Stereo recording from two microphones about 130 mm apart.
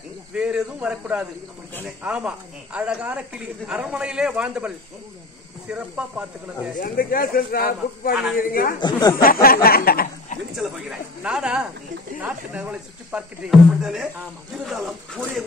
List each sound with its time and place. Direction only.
0.3 s speech: 5° right (ahead or behind)
6.8 s speech: 90° left
8.7 s speech: 35° left (ahead or behind)
9.2 s speech: 90° left
10.5 s speech: 5° right (ahead or behind)